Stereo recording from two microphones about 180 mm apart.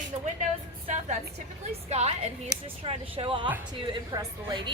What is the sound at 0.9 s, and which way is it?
A woman's voice, 35° right (ahead or behind).